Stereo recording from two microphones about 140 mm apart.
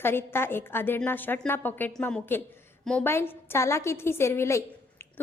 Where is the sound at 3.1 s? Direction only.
15° left (ahead or behind).